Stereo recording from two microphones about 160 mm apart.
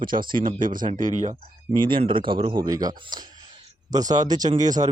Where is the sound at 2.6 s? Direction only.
25° right (ahead or behind).